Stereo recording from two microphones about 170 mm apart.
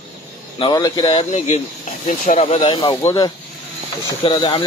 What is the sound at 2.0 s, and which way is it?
Speech, 45° left (ahead or behind).